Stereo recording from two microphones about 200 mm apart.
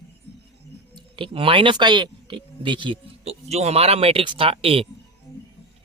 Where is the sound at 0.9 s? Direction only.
25° right (ahead or behind).